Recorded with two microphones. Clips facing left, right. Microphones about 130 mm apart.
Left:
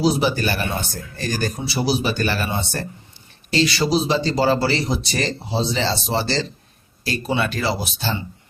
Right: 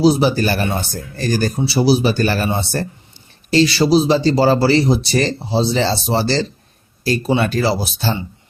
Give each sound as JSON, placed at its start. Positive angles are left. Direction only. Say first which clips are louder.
{"t": 0.0, "sound": "speech", "louder": "right 5 dB", "side_deg": -35}